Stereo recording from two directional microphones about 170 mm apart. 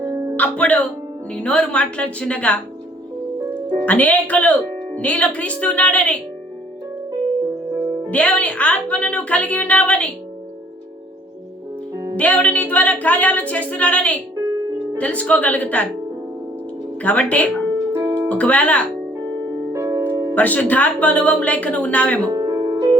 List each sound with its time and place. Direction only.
0.0 s music: 15° right (ahead or behind)
0.3 s speech: 10° left (ahead or behind)
3.8 s speech: 10° left (ahead or behind)
8.1 s speech: 10° left (ahead or behind)
12.1 s speech: 10° left (ahead or behind)
17.0 s speech: 10° left (ahead or behind)
17.9 s music: 15° right (ahead or behind)
18.3 s speech: 5° left (ahead or behind)
19.7 s music: 20° right (ahead or behind)
20.3 s speech: 10° left (ahead or behind)
22.3 s music: 20° right (ahead or behind)